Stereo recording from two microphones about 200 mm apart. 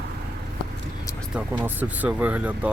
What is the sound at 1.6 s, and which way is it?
Speech, 10° right (ahead or behind).